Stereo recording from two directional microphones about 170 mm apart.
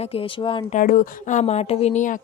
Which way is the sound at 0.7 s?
50° left (ahead or behind).